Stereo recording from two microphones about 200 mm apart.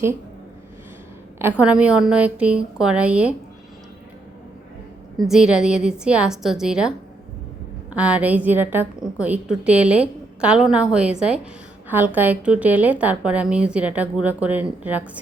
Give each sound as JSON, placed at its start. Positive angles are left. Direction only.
{"t": 1.4, "sound": "a woman's voice", "side_deg": -10}
{"t": 5.3, "sound": "a woman's voice", "side_deg": -5}
{"t": 7.9, "sound": "a woman's voice", "side_deg": -5}